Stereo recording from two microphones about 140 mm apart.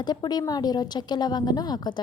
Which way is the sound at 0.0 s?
30° left (ahead or behind).